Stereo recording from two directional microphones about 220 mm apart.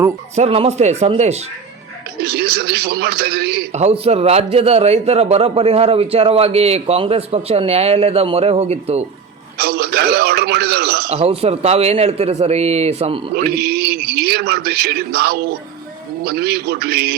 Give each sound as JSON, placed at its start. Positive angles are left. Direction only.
{"t": 0.3, "sound": "a man's voice", "side_deg": -25}
{"t": 2.2, "sound": "a man's voice", "side_deg": -45}
{"t": 3.7, "sound": "a man's voice", "side_deg": -30}
{"t": 9.6, "sound": "a man's voice", "side_deg": -45}
{"t": 11.1, "sound": "a man's voice", "side_deg": -25}
{"t": 13.3, "sound": "a man's voice", "side_deg": -45}